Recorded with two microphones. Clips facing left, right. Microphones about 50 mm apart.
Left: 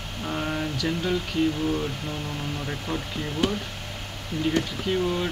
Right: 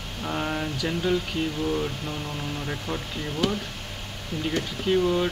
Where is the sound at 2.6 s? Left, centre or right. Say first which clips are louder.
Left 1 dB; centre.